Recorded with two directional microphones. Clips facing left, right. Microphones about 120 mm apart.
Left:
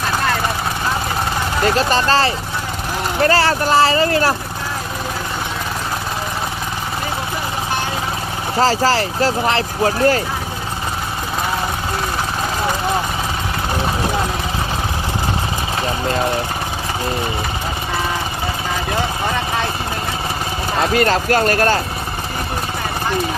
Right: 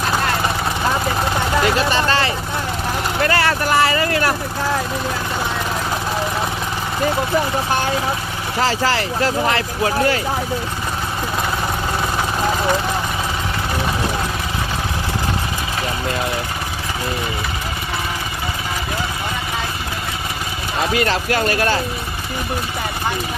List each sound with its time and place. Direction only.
1.6 s speech: 35° left (ahead or behind)
8.6 s speech: 35° left (ahead or behind)
20.9 s speech: 45° left (ahead or behind)